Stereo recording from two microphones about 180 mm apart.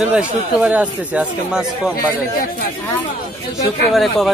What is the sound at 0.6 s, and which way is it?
Speech, 5° right (ahead or behind).